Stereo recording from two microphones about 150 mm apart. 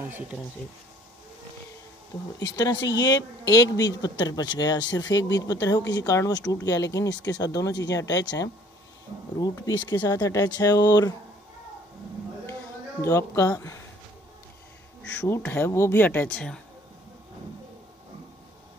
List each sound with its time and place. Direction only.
2.3 s speech: 25° left (ahead or behind)
13.0 s speech: 20° left (ahead or behind)
15.0 s speech: 15° left (ahead or behind)